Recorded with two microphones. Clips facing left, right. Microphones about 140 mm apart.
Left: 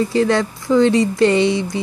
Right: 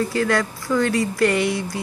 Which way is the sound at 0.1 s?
25° left (ahead or behind).